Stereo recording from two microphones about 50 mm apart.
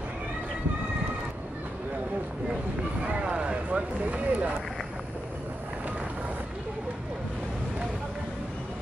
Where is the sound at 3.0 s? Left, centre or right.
Right.